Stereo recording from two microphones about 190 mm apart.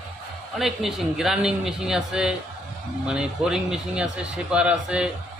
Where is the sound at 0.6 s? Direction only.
Centre (ahead or behind).